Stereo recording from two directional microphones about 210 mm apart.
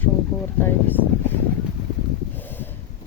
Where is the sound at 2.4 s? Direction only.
10° left (ahead or behind).